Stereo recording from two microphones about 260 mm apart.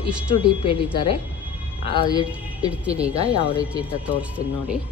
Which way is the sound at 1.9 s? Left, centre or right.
Centre.